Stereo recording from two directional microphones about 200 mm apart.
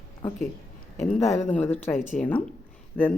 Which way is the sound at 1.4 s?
10° left (ahead or behind).